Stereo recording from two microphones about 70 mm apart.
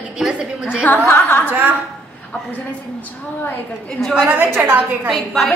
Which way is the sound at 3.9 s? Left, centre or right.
Centre.